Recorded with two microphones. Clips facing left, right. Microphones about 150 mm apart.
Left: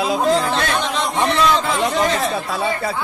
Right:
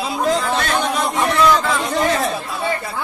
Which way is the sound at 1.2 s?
20° left (ahead or behind).